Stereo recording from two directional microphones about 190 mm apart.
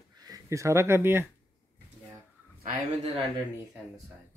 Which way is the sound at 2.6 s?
40° right (ahead or behind).